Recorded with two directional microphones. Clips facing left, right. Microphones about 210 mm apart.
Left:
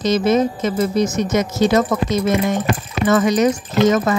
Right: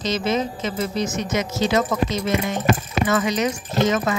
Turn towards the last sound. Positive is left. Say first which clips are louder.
# left 5 dB
turn(degrees=45)  # may be behind; listen again after turning